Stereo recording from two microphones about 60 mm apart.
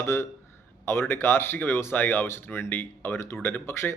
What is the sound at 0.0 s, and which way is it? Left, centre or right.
A man's voice, left.